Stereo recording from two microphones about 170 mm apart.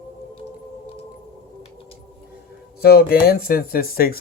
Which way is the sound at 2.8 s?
65° left (ahead or behind).